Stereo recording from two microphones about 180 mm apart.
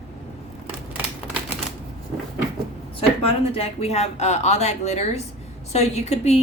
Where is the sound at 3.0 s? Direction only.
30° left (ahead or behind).